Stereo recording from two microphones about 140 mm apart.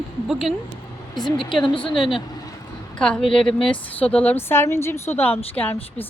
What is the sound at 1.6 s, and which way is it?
Speech, 35° left (ahead or behind).